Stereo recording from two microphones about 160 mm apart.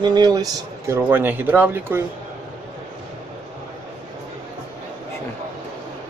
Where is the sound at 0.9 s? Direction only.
10° right (ahead or behind).